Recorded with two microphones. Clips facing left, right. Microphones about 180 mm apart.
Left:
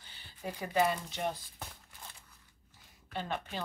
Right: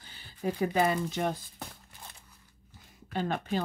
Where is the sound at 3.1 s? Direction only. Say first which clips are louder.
Right 7 dB; 45° right (ahead or behind).